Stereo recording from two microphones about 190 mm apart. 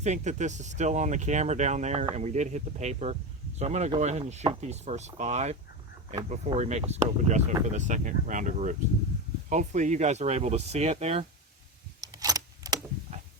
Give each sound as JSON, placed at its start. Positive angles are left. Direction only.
{"t": 0.0, "sound": "speech", "side_deg": -40}
{"t": 12.1, "sound": "keys jangling", "side_deg": -20}